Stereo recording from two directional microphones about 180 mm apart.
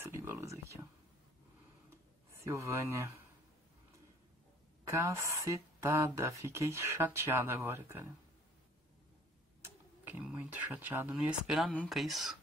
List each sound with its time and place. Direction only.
0.0 s a sound: 15° right (ahead or behind)
2.4 s speech: 15° right (ahead or behind)
4.8 s speech: 15° right (ahead or behind)
10.0 s speech: 10° right (ahead or behind)